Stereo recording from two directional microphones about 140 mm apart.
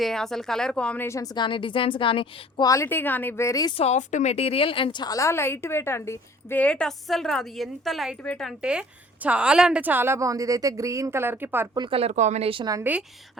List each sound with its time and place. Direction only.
0.0 s speech: 5° left (ahead or behind)
1.0 s a woman's voice: 25° left (ahead or behind)
2.6 s a woman's voice: 20° left (ahead or behind)
3.8 s a woman's voice: 55° left (ahead or behind); by 11.7 s 15° right (ahead or behind)
11.7 s speech: 30° right (ahead or behind)
11.9 s speech: 55° right (ahead or behind)
12.8 s a woman's voice: 10° right (ahead or behind)